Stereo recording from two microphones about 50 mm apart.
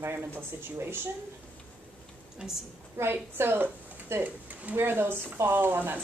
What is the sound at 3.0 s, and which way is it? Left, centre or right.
A woman's voice, right.